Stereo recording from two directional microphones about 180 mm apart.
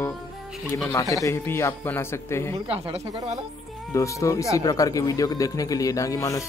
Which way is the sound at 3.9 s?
15° left (ahead or behind).